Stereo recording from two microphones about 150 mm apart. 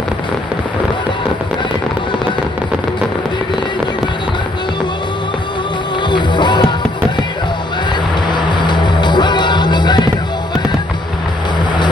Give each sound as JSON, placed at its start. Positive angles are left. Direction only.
{"t": 6.0, "sound": "music", "side_deg": 30}
{"t": 8.3, "sound": "music", "side_deg": 30}